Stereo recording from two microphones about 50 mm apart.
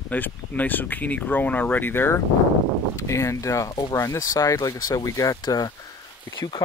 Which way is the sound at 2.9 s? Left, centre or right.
Left.